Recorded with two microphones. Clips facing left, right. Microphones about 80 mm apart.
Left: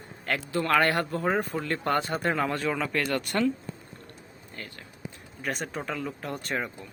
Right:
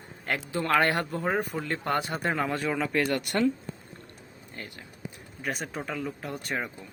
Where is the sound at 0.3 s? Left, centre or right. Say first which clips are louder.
Left 1 dB; centre.